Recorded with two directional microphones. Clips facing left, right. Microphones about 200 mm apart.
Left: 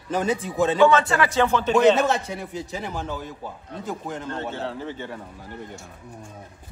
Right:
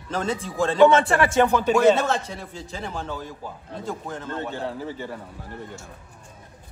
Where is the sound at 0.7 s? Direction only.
20° right (ahead or behind).